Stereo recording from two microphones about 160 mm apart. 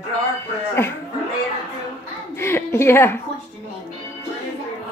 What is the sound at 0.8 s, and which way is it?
Speech, 15° left (ahead or behind).